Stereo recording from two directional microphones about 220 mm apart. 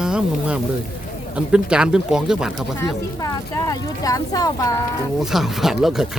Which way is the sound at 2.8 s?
15° left (ahead or behind).